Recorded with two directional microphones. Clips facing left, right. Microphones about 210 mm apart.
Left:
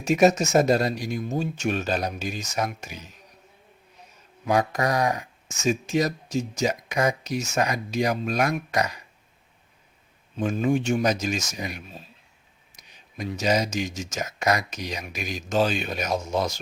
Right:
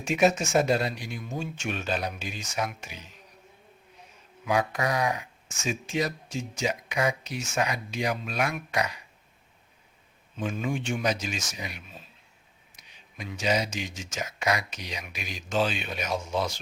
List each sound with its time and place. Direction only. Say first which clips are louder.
0.0 s speech: left 4 dB; 40° left (ahead or behind)
4.4 s speech: left 4 dB; 40° left (ahead or behind)
10.3 s speech: left 7 dB; 40° left (ahead or behind)